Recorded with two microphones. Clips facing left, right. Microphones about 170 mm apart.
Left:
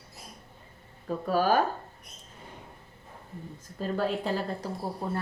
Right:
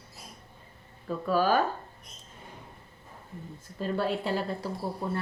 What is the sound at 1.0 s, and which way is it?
Speech, 45° left (ahead or behind).